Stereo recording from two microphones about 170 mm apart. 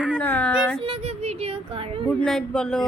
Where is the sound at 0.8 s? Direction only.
35° right (ahead or behind).